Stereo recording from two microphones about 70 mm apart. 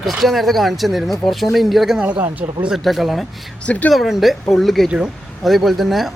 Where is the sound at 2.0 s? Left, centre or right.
Centre.